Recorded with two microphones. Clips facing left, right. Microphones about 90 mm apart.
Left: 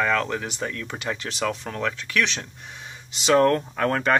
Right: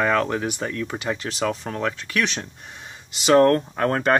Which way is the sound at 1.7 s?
20° right (ahead or behind).